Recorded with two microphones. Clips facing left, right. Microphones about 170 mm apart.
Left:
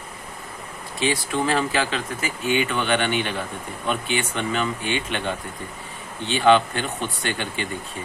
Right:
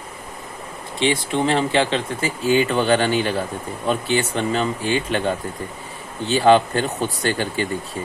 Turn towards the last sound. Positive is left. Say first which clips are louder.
# right 6 dB
turn(degrees=-35)  # may be behind; listen again after turning